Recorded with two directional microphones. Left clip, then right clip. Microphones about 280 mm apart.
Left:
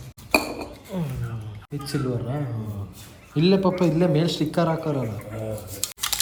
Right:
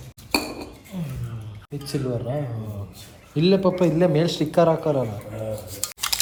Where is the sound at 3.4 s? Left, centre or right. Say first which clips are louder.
Right 1 dB; centre.